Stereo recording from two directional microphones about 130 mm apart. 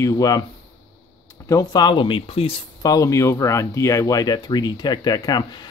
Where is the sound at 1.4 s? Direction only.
30° left (ahead or behind); by 2.6 s 45° left (ahead or behind).